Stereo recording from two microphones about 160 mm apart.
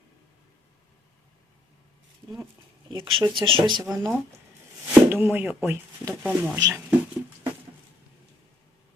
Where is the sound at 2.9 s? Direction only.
30° right (ahead or behind).